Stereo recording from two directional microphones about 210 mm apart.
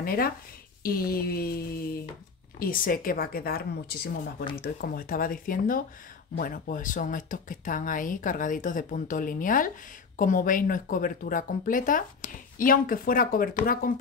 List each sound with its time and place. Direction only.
0.0 s speech: 45° left (ahead or behind)